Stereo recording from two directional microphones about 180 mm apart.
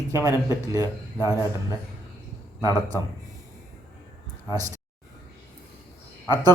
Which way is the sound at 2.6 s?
15° left (ahead or behind).